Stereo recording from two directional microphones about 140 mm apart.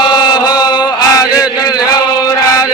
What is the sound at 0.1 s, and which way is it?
Chant, 30° left (ahead or behind).